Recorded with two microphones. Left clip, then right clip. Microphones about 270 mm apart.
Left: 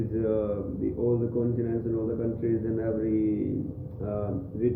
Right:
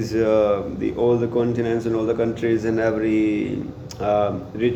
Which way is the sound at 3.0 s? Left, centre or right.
Right.